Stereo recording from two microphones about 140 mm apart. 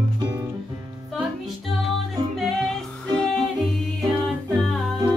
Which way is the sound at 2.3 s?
Centre (ahead or behind).